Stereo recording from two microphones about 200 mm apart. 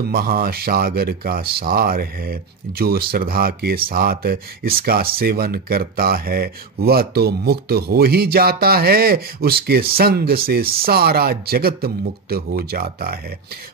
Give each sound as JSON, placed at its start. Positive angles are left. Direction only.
{"t": 0.0, "sound": "speech", "side_deg": -50}